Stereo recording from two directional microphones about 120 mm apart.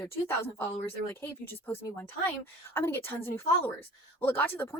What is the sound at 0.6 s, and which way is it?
Speech, 20° left (ahead or behind).